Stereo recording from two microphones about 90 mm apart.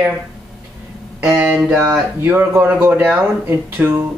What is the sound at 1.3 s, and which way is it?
A man's voice, 25° right (ahead or behind).